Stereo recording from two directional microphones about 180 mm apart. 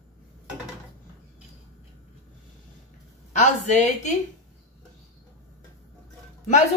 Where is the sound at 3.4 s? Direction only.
40° left (ahead or behind).